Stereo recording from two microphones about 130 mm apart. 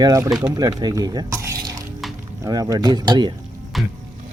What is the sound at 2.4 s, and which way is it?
Speech, 30° right (ahead or behind).